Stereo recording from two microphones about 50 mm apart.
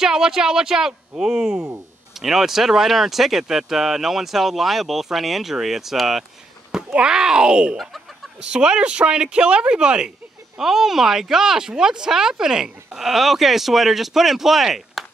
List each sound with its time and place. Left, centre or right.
0.0 s speech: centre
6.9 s speech: centre
7.7 s speech: centre
8.5 s speech: centre
10.6 s speech: centre